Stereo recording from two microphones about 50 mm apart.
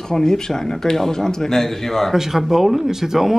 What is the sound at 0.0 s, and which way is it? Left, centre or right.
A man's voice, centre.